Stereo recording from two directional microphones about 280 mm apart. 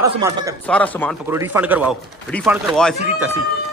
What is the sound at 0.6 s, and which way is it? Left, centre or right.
Speech, centre.